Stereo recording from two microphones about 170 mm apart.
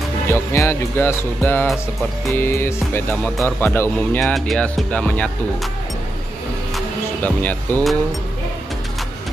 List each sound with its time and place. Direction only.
0.3 s speech: 15° left (ahead or behind)
4.2 s speech: centre (ahead or behind)
7.4 s speech: 10° left (ahead or behind)